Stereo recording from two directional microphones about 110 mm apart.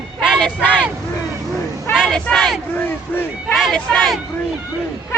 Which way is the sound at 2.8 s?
15° left (ahead or behind).